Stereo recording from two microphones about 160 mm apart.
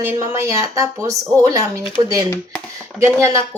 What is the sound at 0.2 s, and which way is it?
Speech, 20° right (ahead or behind).